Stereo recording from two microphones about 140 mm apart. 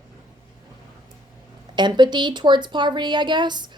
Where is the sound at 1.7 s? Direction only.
35° right (ahead or behind).